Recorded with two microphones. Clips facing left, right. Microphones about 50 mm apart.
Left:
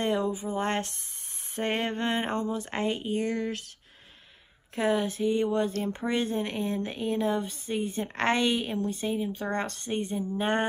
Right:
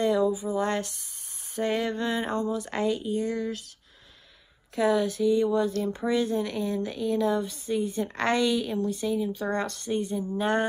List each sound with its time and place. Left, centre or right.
0.0 s a sound: left
0.6 s a woman's voice: left
4.7 s a woman's voice: left
10.4 s mantra: left